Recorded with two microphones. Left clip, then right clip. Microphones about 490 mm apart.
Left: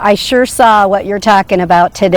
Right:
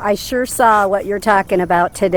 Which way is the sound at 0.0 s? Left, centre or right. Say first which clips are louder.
Left 8 dB; left.